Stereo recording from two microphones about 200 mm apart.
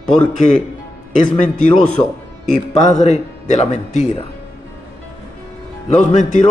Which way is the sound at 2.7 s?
35° left (ahead or behind).